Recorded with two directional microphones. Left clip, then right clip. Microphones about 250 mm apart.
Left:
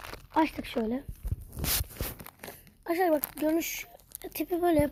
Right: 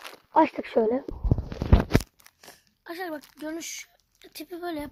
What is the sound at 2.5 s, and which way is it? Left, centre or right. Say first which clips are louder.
Crumpling: right 1 dB; right.